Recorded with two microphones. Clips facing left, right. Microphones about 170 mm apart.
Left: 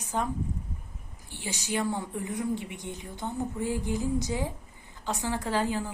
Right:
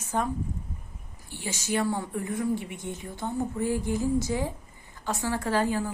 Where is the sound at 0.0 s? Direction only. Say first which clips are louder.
Right 2 dB; 15° left (ahead or behind).